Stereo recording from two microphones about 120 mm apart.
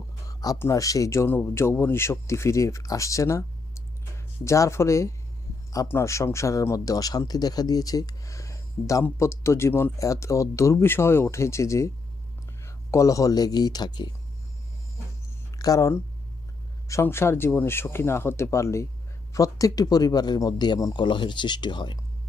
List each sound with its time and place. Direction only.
0.3 s a man's voice: 30° left (ahead or behind)
15.5 s a man's voice: 30° left (ahead or behind)